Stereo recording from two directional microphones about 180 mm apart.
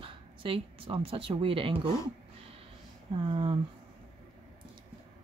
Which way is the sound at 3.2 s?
30° right (ahead or behind).